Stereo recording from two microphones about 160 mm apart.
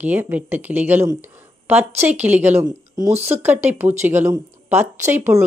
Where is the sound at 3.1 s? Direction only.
40° right (ahead or behind).